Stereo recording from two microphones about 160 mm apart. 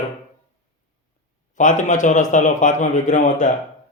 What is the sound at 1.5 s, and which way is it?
Speech, 50° left (ahead or behind).